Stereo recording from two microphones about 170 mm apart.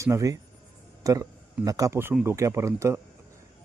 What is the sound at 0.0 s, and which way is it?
A man's voice, 20° right (ahead or behind).